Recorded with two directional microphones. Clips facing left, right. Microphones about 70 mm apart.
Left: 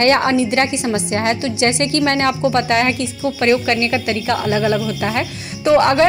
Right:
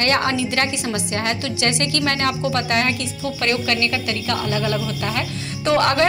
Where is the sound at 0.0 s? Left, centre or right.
Left.